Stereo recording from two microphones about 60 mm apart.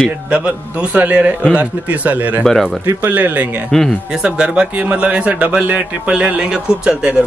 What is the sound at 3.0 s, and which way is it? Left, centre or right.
Speech, right.